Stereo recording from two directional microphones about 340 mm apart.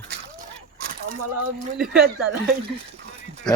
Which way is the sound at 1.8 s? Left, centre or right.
Centre.